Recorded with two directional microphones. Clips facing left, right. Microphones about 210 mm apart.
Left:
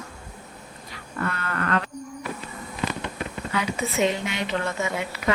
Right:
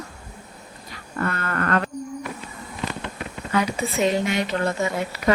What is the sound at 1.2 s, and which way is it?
Speech, 45° right (ahead or behind).